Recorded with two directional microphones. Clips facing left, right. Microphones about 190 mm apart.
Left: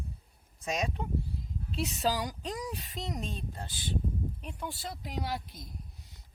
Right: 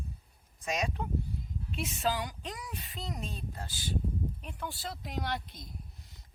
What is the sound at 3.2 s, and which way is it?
Speech, 25° left (ahead or behind).